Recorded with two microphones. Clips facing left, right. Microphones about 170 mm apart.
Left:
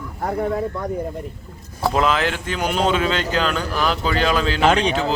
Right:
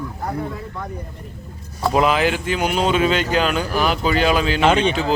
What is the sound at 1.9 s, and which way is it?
Speech, 10° right (ahead or behind).